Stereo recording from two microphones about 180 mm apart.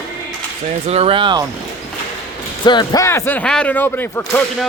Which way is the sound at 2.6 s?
25° left (ahead or behind).